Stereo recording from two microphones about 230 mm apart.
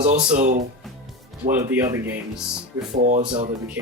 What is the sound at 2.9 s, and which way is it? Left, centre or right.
Speech, right.